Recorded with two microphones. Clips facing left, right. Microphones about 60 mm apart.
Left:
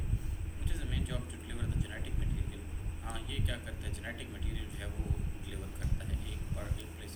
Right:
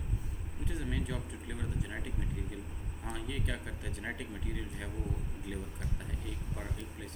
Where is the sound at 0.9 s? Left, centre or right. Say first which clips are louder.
Right 3 dB; right.